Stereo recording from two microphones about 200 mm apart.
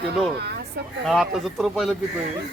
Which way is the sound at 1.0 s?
Centre (ahead or behind).